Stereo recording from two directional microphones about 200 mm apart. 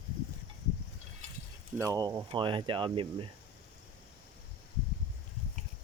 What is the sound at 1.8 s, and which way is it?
Speech, 15° right (ahead or behind).